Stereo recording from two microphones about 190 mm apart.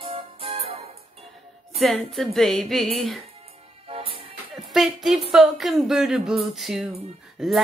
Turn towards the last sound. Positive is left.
turn(degrees=0)  # may be behind; listen again after turning